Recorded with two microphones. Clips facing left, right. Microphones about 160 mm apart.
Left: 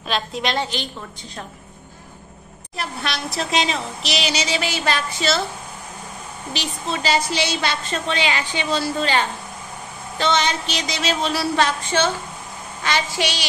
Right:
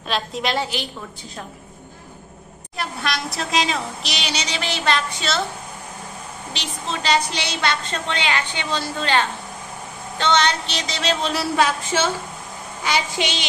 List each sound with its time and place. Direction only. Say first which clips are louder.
0.1 s a woman's voice: even; centre (ahead or behind)
2.8 s a woman's voice: right 1 dB; centre (ahead or behind)
7.0 s a woman's voice: left 1 dB; 10° left (ahead or behind); by 13.5 s 20° right (ahead or behind)